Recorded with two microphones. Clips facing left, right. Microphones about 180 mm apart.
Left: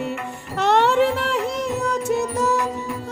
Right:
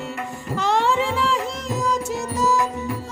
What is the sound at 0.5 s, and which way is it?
Music, 65° left (ahead or behind).